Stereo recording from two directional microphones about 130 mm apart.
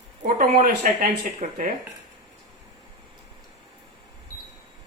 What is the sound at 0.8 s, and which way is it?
Speech, 90° right.